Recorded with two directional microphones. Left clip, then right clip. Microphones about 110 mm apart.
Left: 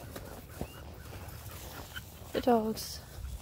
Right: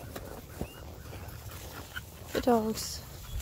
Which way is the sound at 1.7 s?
20° left (ahead or behind).